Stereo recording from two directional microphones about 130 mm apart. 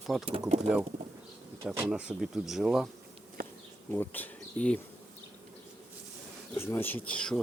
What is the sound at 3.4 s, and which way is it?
Bee, 90° right.